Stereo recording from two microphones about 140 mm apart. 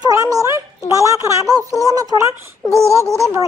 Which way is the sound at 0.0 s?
25° right (ahead or behind).